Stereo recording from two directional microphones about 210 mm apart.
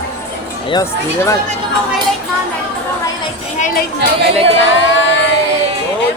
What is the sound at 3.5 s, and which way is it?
Speech, 40° left (ahead or behind).